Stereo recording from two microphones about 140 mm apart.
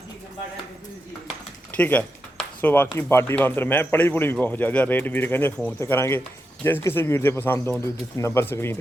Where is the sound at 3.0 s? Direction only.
20° left (ahead or behind).